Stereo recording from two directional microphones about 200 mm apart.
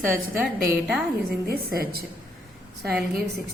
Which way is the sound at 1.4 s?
50° right (ahead or behind).